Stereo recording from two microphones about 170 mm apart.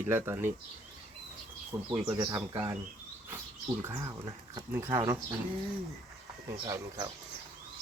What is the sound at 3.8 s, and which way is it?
Speech, 15° right (ahead or behind).